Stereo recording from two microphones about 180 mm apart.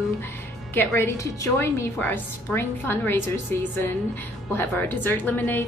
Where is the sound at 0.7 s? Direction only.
10° left (ahead or behind).